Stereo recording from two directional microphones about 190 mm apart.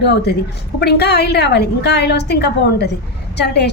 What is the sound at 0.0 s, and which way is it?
A woman's voice, 60° left (ahead or behind).